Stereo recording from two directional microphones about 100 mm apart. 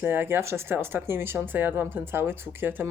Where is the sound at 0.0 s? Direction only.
20° right (ahead or behind).